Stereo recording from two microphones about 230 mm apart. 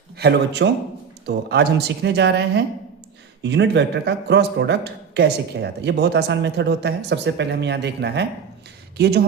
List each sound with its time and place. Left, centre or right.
0.2 s speech: right